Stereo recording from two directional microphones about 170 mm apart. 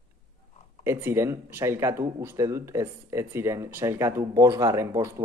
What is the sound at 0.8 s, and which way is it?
Speech, 15° right (ahead or behind).